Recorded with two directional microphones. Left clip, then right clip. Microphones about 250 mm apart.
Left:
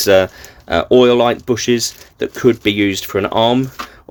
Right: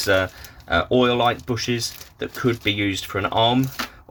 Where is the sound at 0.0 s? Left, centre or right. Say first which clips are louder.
Left 8 dB; left.